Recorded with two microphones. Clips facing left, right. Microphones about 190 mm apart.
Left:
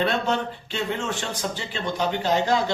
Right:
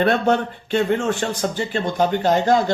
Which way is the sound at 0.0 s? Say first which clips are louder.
Right 6 dB; 55° right (ahead or behind).